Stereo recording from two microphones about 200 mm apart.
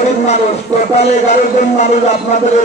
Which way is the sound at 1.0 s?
35° left (ahead or behind).